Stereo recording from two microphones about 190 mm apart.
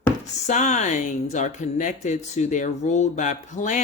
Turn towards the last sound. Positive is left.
turn(degrees=40)  # may be behind; listen again after turning